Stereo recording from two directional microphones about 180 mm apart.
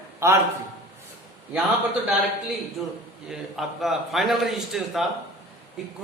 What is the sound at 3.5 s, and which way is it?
Speech, centre (ahead or behind).